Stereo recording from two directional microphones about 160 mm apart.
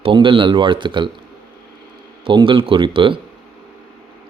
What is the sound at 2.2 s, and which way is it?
Speech, 30° right (ahead or behind).